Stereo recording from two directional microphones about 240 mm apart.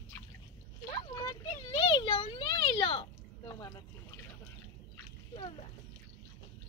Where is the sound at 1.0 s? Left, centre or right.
Centre.